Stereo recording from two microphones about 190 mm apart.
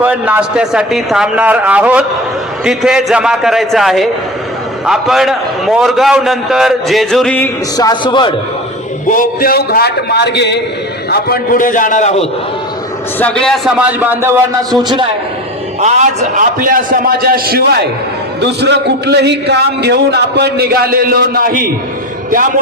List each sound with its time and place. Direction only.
0.0 s a man's voice: 5° right (ahead or behind); by 8.4 s 25° left (ahead or behind)
9.0 s a man's voice: 45° left (ahead or behind); by 10.6 s 65° left (ahead or behind)
11.1 s a man's voice: 50° left (ahead or behind)
13.1 s a man's voice: 5° left (ahead or behind); by 15.0 s 20° right (ahead or behind)
15.8 s a man's voice: 40° right (ahead or behind)